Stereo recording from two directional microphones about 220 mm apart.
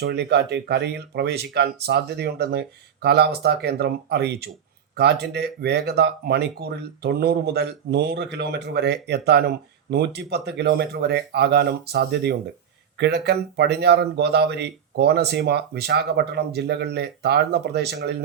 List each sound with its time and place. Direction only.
0.0 s speech: 50° right (ahead or behind)